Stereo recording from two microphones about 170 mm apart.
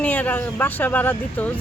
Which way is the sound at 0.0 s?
10° left (ahead or behind).